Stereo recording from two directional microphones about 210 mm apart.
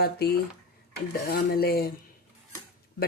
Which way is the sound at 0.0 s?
50° left (ahead or behind).